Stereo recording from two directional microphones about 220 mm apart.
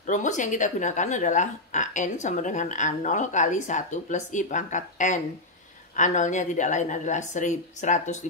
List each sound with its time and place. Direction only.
0.0 s speech: 35° left (ahead or behind)